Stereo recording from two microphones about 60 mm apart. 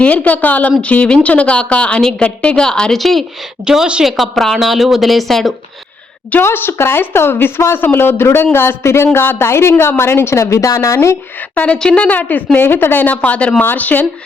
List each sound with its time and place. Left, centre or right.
0.0 s a woman's voice: left
3.0 s speech: centre
3.7 s a woman's voice: centre
4.0 s speech: centre
6.4 s speech: left
9.1 s speech: left
9.4 s speech: left
11.5 s a woman's voice: left